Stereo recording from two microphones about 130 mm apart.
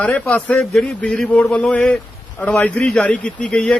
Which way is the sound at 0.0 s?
10° left (ahead or behind).